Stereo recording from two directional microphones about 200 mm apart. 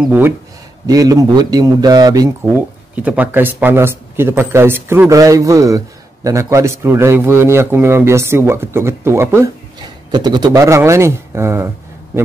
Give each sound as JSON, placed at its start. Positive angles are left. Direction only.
{"t": 0.0, "sound": "a man's voice", "side_deg": -10}
{"t": 3.0, "sound": "a man's voice", "side_deg": -10}